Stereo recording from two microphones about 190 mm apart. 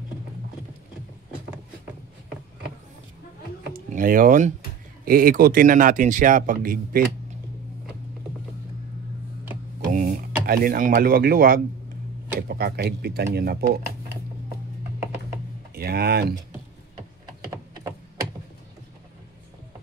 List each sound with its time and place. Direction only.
3.7 s speech: 45° right (ahead or behind)
9.9 s a sound: 45° right (ahead or behind)
10.4 s speech: 50° right (ahead or behind)
15.7 s speech: 55° right (ahead or behind)